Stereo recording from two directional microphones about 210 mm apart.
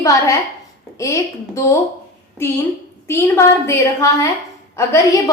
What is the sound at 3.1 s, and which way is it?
A woman's voice, 10° left (ahead or behind).